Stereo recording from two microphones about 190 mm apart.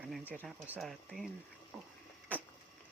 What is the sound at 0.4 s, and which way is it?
Speech, centre (ahead or behind).